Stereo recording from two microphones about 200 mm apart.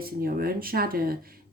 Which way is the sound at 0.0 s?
45° right (ahead or behind).